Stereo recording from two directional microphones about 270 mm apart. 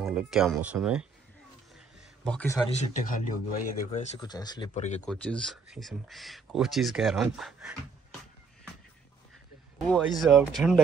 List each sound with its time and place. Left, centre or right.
0.0 s speech: centre
2.2 s speech: centre
2.8 s speech: left
4.2 s speech: centre
5.0 s speech: centre
9.8 s speech: centre